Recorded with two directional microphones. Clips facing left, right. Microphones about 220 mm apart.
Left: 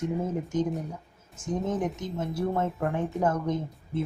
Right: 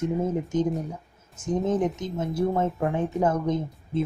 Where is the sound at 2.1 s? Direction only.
20° right (ahead or behind).